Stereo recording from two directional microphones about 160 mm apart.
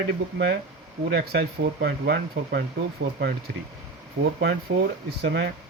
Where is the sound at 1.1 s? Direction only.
80° right.